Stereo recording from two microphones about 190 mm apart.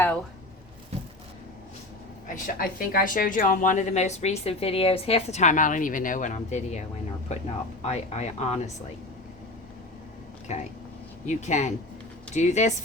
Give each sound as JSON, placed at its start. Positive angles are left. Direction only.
{"t": 2.2, "sound": "a woman's voice", "side_deg": 45}
{"t": 10.5, "sound": "a woman's voice", "side_deg": 40}